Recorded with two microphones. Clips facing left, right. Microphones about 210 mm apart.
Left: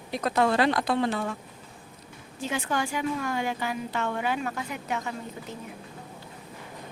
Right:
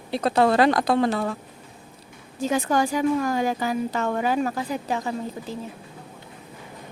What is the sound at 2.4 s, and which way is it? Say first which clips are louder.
A woman's voice: right 7 dB; 40° right (ahead or behind).